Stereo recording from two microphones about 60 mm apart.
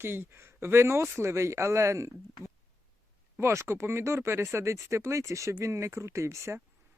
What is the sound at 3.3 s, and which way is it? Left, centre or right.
Speech, right.